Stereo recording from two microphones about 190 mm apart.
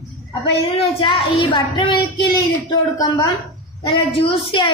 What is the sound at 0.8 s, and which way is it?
Speech, 25° left (ahead or behind).